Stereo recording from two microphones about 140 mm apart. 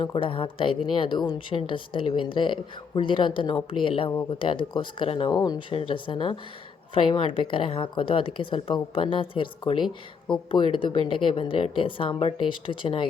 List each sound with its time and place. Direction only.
0.0 s a woman's voice: 40° left (ahead or behind)